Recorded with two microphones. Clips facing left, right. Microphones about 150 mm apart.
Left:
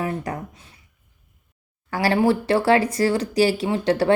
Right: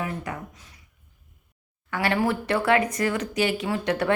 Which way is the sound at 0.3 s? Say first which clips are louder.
Left 4 dB; 40° left (ahead or behind).